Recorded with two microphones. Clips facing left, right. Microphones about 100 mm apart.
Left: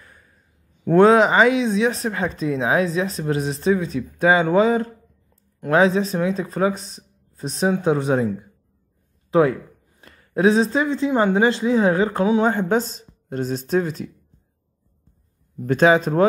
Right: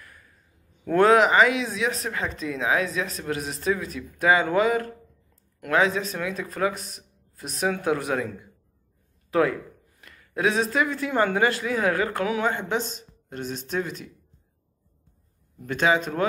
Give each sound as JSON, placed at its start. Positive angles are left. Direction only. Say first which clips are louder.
{"t": 0.0, "sound": "a sound", "louder": "even", "side_deg": 25}
{"t": 0.8, "sound": "speech", "louder": "left 4 dB", "side_deg": 25}
{"t": 12.4, "sound": "speech", "louder": "left 6 dB", "side_deg": 40}
{"t": 15.6, "sound": "speech", "louder": "left 7 dB", "side_deg": 40}